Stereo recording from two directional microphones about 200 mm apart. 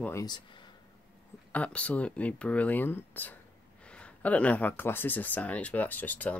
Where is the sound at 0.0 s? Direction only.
15° left (ahead or behind).